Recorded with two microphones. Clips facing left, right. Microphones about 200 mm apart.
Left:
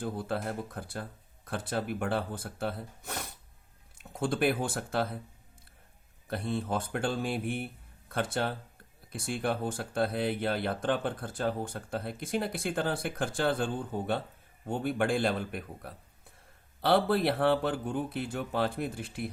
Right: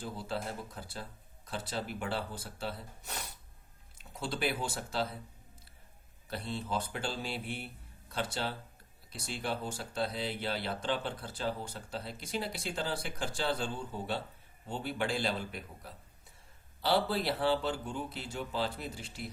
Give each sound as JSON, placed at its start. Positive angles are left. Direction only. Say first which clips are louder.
{"t": 0.0, "sound": "a man's voice", "louder": "left 5 dB", "side_deg": 55}
{"t": 6.2, "sound": "a man's voice", "louder": "left 6 dB", "side_deg": 50}